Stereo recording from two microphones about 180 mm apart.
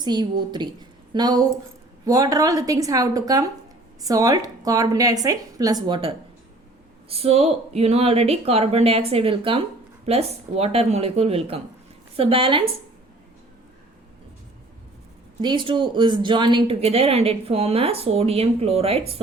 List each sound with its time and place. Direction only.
0.0 s a woman's voice: 25° right (ahead or behind)
5.9 s a woman's voice: 30° right (ahead or behind)
15.4 s speech: 25° right (ahead or behind)